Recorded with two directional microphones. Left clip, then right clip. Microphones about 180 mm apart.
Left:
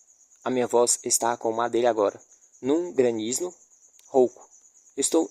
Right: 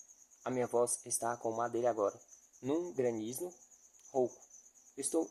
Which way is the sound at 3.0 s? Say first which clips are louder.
Left 12 dB; 45° left (ahead or behind).